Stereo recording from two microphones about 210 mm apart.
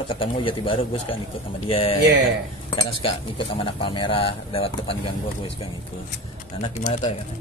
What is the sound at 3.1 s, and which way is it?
Speech, 25° left (ahead or behind).